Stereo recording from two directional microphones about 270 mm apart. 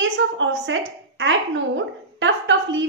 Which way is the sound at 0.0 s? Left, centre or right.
Right.